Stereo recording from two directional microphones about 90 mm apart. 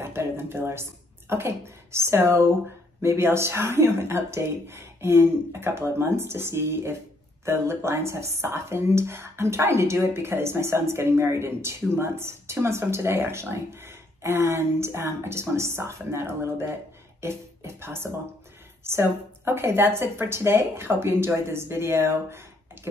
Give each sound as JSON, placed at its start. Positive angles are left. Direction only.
{"t": 0.0, "sound": "speech", "side_deg": -30}
{"t": 17.2, "sound": "music", "side_deg": -30}
{"t": 18.9, "sound": "a woman's voice", "side_deg": -25}